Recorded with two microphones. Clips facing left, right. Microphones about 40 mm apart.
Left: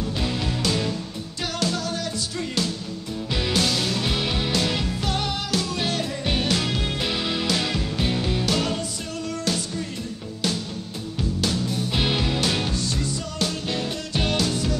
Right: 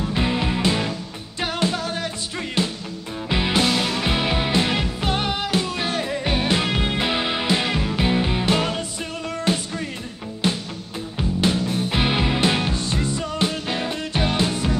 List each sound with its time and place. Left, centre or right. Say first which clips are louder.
0.0 s music: right 4 dB; right